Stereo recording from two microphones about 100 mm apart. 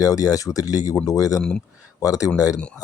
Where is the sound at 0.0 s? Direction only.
40° left (ahead or behind).